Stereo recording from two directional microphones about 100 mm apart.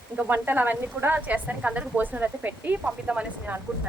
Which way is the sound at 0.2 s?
20° right (ahead or behind).